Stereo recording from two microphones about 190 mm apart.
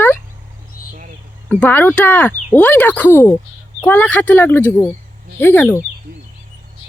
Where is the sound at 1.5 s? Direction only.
10° left (ahead or behind).